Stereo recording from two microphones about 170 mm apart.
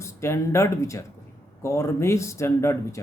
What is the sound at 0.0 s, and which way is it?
Speech, 15° left (ahead or behind).